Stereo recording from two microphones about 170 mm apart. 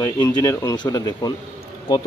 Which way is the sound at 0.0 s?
20° left (ahead or behind).